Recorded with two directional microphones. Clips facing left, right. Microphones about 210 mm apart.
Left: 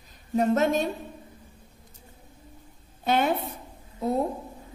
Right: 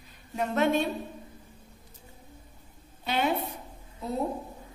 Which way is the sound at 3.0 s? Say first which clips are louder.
Left 4 dB; 50° left (ahead or behind).